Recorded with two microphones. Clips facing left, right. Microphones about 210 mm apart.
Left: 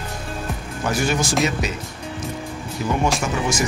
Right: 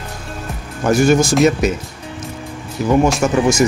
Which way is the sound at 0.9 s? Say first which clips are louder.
Right 9 dB; 45° right (ahead or behind).